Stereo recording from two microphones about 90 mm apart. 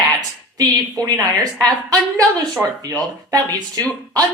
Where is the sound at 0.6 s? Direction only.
40° right (ahead or behind).